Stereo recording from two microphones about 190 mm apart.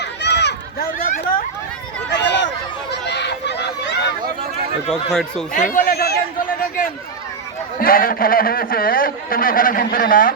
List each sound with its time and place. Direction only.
0.0 s children playing: 65° left (ahead or behind); by 1.5 s 45° left (ahead or behind)
2.0 s a sound: 65° left (ahead or behind)
5.5 s a man's voice: 45° left (ahead or behind)